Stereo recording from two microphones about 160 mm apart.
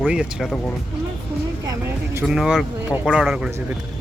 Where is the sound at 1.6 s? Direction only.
20° right (ahead or behind).